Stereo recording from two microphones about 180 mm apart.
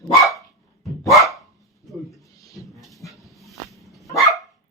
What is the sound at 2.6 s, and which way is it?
Dog, centre (ahead or behind).